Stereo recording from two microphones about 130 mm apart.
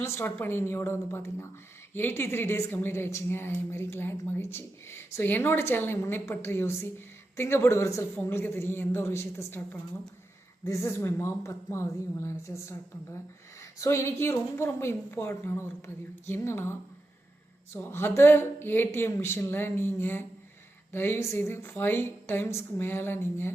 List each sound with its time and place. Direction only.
0.0 s a woman's voice: 20° left (ahead or behind)
17.7 s a woman's voice: 20° left (ahead or behind)